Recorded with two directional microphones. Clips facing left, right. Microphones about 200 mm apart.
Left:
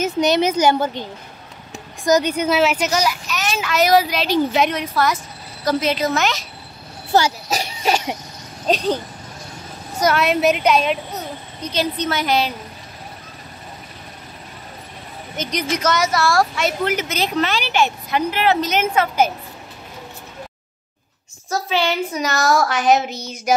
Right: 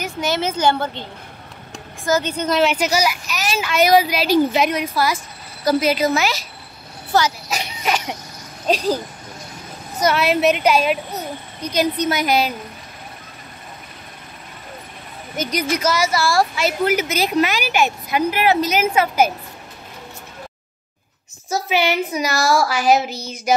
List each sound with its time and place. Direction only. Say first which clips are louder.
0.0 s a woman's voice: left 5 dB; 20° left (ahead or behind)
2.0 s a woman's voice: left 3 dB; 15° left (ahead or behind)
2.8 s speech: right 1 dB; 10° right (ahead or behind)
7.4 s a sound: left 3 dB; 35° left (ahead or behind)
8.6 s speech: even; 5° right (ahead or behind)
9.9 s a woman's voice: even; 5° right (ahead or behind)
15.3 s speech: right 2 dB; 10° right (ahead or behind)
21.6 s speech: right 1 dB; 15° right (ahead or behind)